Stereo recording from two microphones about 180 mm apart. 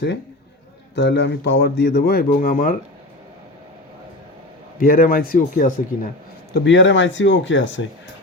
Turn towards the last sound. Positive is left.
turn(degrees=90)